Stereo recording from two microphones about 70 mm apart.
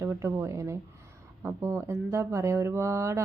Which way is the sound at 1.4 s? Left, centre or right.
Right.